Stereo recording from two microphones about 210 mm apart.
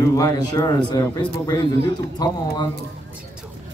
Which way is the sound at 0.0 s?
15° left (ahead or behind).